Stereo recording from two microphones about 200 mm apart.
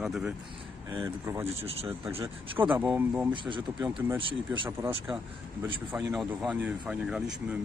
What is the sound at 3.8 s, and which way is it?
Speech, 5° right (ahead or behind).